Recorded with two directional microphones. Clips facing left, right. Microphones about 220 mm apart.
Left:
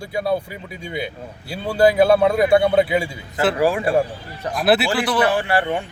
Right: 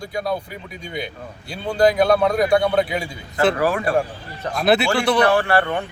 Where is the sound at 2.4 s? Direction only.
25° left (ahead or behind).